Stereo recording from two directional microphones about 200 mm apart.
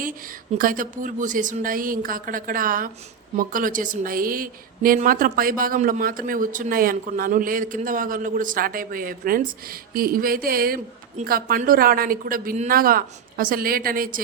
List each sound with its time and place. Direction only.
0.6 s a woman's voice: 45° right (ahead or behind)